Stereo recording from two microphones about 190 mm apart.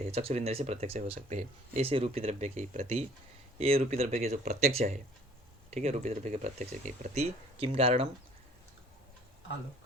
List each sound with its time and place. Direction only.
0.1 s speech: 35° right (ahead or behind)